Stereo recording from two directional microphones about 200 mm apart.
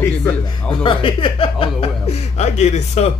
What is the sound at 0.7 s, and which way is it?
Speech, 25° left (ahead or behind).